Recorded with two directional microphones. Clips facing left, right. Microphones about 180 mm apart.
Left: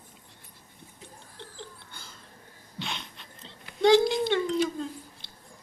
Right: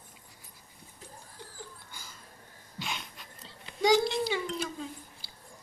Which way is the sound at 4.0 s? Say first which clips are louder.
Left 5 dB; 5° right (ahead or behind).